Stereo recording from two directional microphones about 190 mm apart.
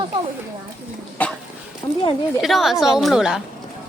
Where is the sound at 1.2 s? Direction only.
10° left (ahead or behind).